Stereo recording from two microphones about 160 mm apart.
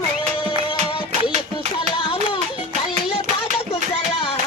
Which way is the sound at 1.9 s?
30° left (ahead or behind).